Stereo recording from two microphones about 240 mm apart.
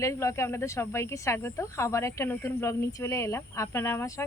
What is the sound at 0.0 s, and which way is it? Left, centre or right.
Speech, centre.